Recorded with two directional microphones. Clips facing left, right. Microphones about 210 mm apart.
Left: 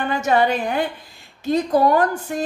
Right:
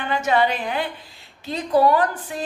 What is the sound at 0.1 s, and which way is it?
A woman's voice, 45° left (ahead or behind).